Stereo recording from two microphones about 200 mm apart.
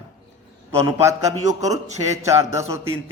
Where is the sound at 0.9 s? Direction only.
15° right (ahead or behind).